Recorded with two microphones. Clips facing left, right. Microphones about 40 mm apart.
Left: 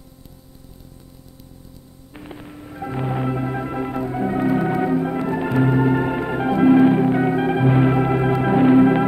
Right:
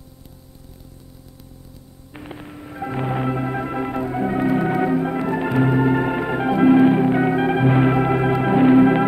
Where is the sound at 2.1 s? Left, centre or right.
Right.